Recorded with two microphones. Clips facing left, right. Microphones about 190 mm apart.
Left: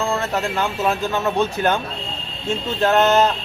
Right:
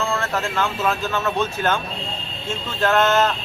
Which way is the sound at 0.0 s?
20° left (ahead or behind).